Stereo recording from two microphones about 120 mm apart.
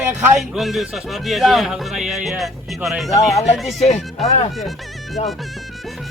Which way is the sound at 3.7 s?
70° left (ahead or behind).